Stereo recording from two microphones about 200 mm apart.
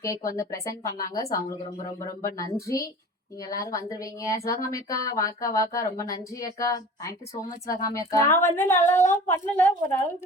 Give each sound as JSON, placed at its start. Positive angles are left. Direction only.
{"t": 0.0, "sound": "speech", "side_deg": 15}